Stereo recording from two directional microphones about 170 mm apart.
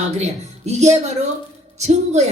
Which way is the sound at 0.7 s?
40° right (ahead or behind).